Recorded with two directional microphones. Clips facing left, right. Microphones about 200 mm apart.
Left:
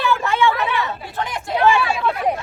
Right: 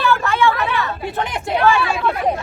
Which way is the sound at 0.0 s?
20° left (ahead or behind).